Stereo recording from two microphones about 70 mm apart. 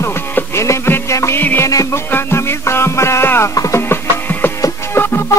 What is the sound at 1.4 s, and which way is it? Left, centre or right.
Music, left.